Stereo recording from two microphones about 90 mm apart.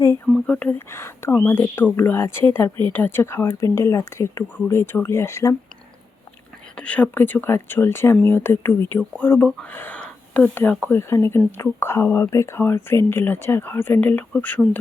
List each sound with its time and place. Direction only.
0.4 s speech: 15° left (ahead or behind)
0.9 s speech: 30° left (ahead or behind)
6.7 s speech: 15° left (ahead or behind)